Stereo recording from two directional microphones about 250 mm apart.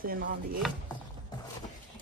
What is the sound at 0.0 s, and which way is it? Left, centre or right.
Chopping, right.